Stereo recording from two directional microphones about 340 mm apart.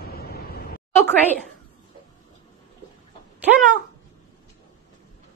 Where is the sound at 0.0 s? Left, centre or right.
Left.